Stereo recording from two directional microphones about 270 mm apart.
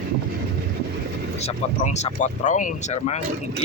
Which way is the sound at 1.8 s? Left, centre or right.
Left.